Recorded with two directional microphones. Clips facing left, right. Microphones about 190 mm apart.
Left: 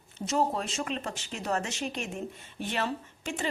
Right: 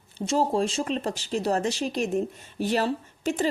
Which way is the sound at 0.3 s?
30° right (ahead or behind).